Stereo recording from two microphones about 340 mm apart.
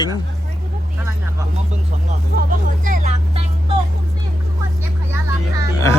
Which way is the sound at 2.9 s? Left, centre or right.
Centre.